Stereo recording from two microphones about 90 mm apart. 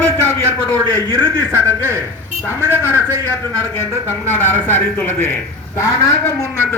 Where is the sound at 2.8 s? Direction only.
25° left (ahead or behind).